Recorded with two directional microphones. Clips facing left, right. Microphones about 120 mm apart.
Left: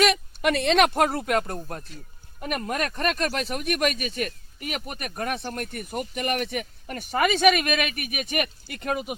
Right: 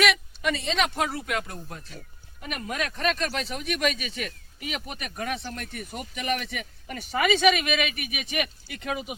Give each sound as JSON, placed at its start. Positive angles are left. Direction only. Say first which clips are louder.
{"t": 0.4, "sound": "speech", "louder": "left 6 dB", "side_deg": 65}